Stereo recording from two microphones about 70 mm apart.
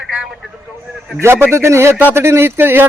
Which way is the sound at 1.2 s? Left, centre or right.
Right.